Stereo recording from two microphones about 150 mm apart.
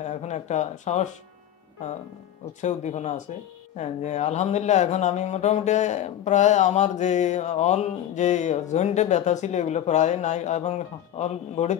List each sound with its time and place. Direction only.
0.0 s speech: 50° left (ahead or behind)
2.6 s speech: 50° left (ahead or behind)